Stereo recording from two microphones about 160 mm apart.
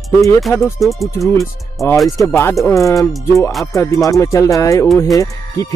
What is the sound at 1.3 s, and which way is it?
Speech, 20° left (ahead or behind).